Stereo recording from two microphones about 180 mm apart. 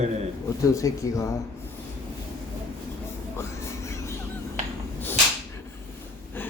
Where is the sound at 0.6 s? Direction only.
15° left (ahead or behind).